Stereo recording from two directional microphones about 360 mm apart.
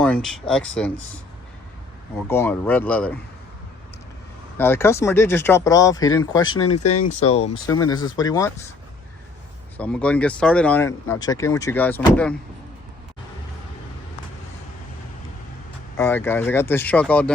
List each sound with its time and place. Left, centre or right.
0.0 s speech: centre
2.3 s speech: centre
4.5 s speech: centre
6.7 s speech: left
7.1 s speech: centre
9.7 s speech: centre
16.0 s speech: centre